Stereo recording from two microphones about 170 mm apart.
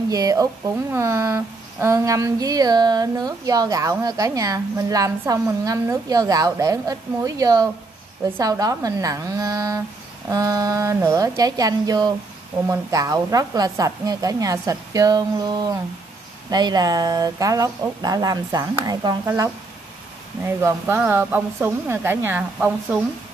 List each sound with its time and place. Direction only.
0.1 s a woman's voice: 20° right (ahead or behind)